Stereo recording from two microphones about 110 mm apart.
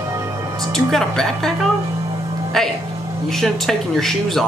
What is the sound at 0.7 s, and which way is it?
Speech, centre (ahead or behind).